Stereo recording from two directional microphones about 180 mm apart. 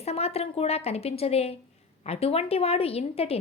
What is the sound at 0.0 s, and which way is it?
A woman's voice, 35° left (ahead or behind).